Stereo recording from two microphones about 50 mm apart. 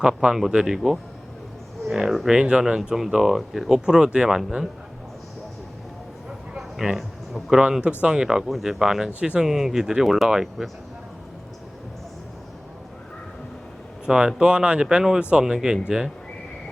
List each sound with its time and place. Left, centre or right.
0.0 s speech: centre
1.9 s speech: centre
2.3 s speech: centre
6.8 s speech: centre
8.4 s speech: centre
9.0 s speech: right
9.4 s speech: centre
14.0 s speech: centre